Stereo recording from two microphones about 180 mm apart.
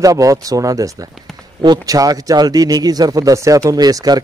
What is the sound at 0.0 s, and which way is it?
A man's voice, 20° right (ahead or behind).